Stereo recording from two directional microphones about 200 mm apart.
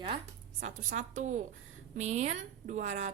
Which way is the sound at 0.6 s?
40° right (ahead or behind).